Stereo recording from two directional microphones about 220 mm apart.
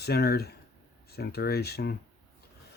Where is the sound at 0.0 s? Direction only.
45° left (ahead or behind).